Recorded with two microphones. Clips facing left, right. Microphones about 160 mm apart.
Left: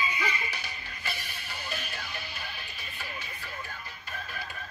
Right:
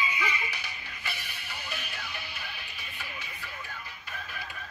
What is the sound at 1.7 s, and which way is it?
Music, 40° left (ahead or behind).